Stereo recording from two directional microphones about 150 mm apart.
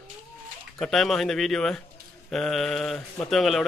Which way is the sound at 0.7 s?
Centre (ahead or behind).